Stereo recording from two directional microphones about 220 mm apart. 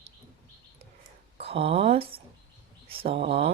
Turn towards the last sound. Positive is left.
turn(degrees=-25)  # may be behind; listen again after turning